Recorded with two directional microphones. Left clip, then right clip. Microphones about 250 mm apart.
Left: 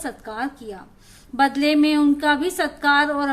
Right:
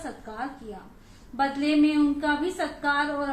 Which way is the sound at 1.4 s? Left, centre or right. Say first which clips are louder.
Left 6 dB; left.